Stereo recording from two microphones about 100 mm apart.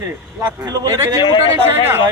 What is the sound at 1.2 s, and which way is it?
Speech, 50° left (ahead or behind).